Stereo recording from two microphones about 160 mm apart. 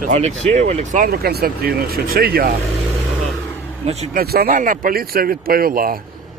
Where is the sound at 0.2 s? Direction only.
45° right (ahead or behind); by 2.5 s 70° right (ahead or behind).